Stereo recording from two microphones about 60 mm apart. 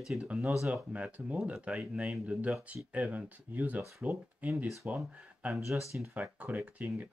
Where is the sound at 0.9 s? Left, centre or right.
Right.